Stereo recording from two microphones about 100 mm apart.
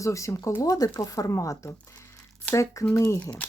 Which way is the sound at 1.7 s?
25° left (ahead or behind).